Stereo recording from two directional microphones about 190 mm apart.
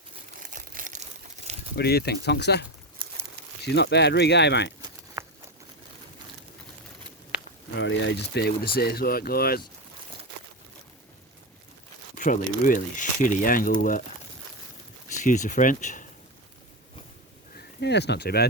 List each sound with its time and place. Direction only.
0.5 s crumpling: 45° right (ahead or behind)
1.7 s speech: 55° left (ahead or behind)
5.2 s patter: 15° right (ahead or behind)
7.8 s speech: 70° left (ahead or behind); by 9.6 s 55° left (ahead or behind)
12.1 s speech: 45° left (ahead or behind)
15.0 s speech: 40° left (ahead or behind)
17.7 s speech: 65° left (ahead or behind)